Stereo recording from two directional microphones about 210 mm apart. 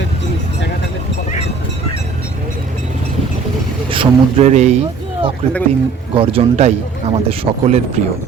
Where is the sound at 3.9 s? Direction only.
30° right (ahead or behind).